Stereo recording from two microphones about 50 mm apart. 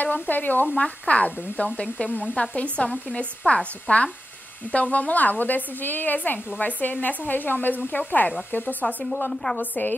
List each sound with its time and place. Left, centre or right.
0.0 s a woman's voice: left
0.7 s a woman's voice: left
9.3 s a woman's voice: centre
9.6 s a woman's voice: left